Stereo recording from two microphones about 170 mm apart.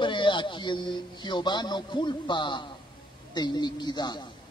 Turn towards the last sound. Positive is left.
turn(degrees=25)  # may be behind; listen again after turning